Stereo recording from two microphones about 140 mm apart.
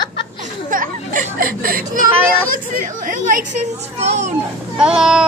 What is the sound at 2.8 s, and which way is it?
Speech, 75° right (ahead or behind).